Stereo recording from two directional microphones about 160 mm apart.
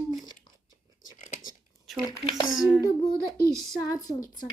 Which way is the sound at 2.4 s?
Centre (ahead or behind).